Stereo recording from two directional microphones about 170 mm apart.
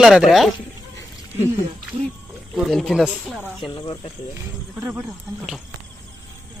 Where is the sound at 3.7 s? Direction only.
25° left (ahead or behind).